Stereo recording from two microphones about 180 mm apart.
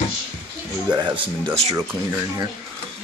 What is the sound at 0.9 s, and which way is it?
Speech, 25° right (ahead or behind).